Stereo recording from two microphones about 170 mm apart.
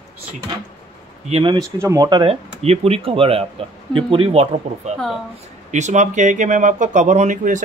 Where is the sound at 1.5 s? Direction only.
20° right (ahead or behind).